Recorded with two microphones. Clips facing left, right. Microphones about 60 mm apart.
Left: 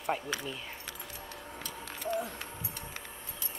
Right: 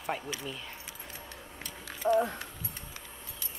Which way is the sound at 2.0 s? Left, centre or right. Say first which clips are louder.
Right 8 dB; right.